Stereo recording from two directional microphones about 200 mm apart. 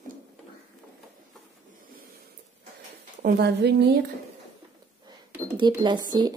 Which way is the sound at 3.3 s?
55° right (ahead or behind).